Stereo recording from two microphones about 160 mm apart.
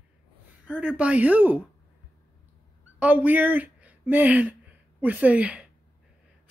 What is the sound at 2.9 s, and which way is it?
Speech, 10° right (ahead or behind).